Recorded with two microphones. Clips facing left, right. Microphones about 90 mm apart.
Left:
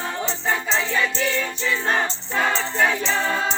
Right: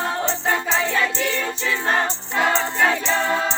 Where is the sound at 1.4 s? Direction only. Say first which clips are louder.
Right 1 dB; 15° right (ahead or behind).